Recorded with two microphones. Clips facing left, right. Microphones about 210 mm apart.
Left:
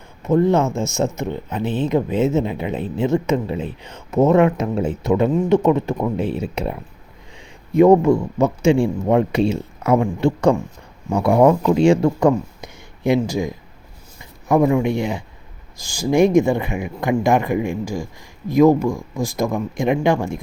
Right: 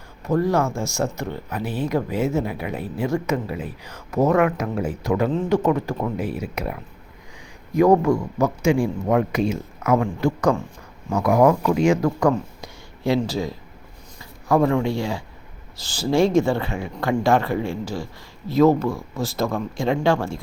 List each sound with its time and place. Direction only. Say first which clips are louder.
0.3 s speech: left 4 dB; 20° left (ahead or behind)